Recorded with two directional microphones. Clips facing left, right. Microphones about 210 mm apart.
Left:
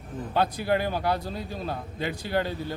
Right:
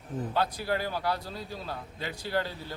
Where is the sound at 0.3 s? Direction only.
20° left (ahead or behind).